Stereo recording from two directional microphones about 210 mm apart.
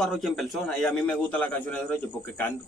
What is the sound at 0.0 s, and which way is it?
A man's voice, centre (ahead or behind).